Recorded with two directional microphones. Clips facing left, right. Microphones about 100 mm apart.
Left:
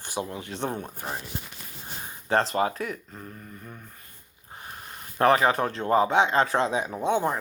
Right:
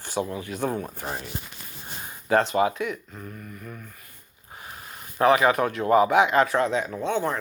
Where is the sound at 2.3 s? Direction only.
35° left (ahead or behind).